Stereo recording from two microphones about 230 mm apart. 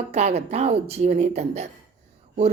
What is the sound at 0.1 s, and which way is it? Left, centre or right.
Speech, right.